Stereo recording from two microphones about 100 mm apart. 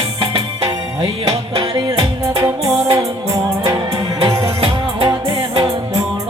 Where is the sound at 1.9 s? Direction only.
30° right (ahead or behind).